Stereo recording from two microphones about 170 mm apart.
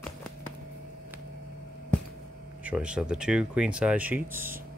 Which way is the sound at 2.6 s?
5° right (ahead or behind).